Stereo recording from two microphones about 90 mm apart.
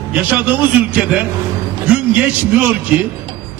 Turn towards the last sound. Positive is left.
turn(degrees=-15)  # may be behind; listen again after turning